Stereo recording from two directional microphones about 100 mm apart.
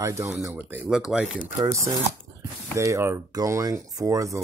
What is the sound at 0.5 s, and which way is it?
Speech, 20° right (ahead or behind).